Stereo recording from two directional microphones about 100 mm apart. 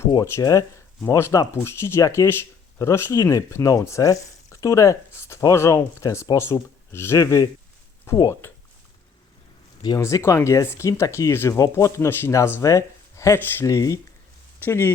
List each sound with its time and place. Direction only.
0.3 s speech: 35° left (ahead or behind)
10.0 s speech: 30° left (ahead or behind)
14.6 s speech: 20° left (ahead or behind)